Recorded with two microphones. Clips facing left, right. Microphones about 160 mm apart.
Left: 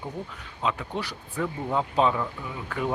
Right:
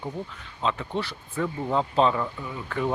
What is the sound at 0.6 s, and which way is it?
Speech, 10° left (ahead or behind).